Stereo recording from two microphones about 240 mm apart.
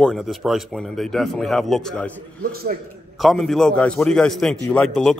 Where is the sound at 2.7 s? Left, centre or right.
Right.